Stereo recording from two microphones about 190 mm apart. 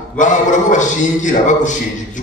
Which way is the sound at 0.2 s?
40° left (ahead or behind).